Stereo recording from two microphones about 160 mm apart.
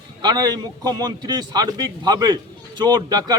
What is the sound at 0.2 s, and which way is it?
A man's voice, 25° right (ahead or behind).